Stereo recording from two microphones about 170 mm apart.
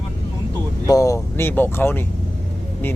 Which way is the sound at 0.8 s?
20° left (ahead or behind).